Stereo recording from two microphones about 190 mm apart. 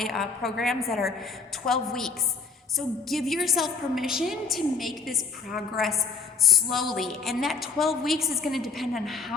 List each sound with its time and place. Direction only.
0.0 s a woman's voice: centre (ahead or behind)